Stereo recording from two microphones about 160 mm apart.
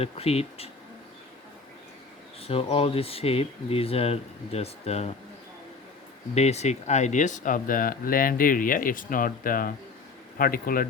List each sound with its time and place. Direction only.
0.0 s speech: 40° left (ahead or behind)
2.4 s speech: 35° left (ahead or behind)
6.3 s speech: 40° left (ahead or behind); by 10.8 s 65° left (ahead or behind)